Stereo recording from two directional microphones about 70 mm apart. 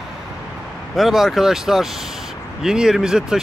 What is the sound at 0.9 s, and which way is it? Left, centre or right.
Speech, centre.